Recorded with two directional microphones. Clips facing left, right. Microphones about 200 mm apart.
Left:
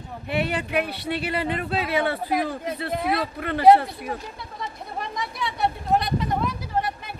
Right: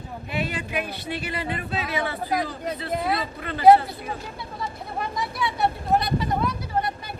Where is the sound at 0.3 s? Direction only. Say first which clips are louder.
Left 4 dB; 60° left (ahead or behind).